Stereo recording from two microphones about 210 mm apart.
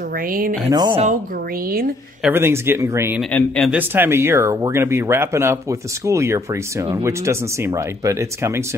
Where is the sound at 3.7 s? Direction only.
10° right (ahead or behind).